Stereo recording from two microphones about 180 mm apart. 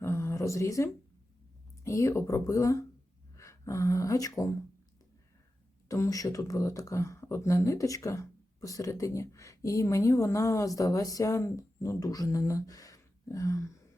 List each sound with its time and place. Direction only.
0.0 s a sound: 15° left (ahead or behind)
1.8 s speech: 15° left (ahead or behind)
5.9 s speech: 20° left (ahead or behind)